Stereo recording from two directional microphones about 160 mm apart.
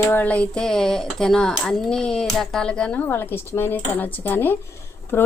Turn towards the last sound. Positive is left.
turn(degrees=15)  # may be behind; listen again after turning